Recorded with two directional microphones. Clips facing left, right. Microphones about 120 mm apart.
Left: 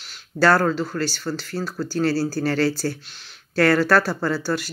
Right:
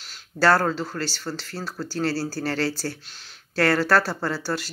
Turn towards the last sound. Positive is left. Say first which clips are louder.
# left 4 dB
turn(degrees=-30)  # may be behind; listen again after turning